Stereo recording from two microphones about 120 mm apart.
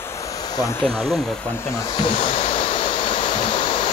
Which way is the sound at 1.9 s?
45° left (ahead or behind).